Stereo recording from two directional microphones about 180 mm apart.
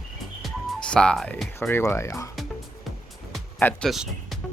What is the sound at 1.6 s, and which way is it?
Speech, 15° left (ahead or behind).